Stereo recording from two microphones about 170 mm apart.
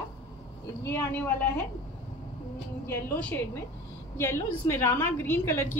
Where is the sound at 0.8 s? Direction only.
15° left (ahead or behind).